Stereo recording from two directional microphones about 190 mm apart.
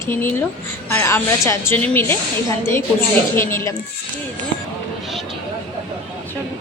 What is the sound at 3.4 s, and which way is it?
Speech, 15° left (ahead or behind).